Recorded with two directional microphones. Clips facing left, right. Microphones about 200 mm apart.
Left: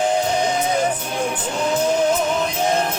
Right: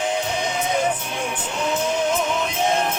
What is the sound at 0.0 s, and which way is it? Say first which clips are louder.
Music: left 5 dB; 35° left (ahead or behind).